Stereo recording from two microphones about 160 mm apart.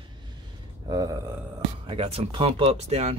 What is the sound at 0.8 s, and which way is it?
Speech, 25° right (ahead or behind).